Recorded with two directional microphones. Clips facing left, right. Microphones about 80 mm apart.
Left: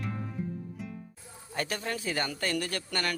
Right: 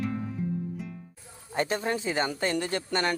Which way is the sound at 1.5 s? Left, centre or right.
Right.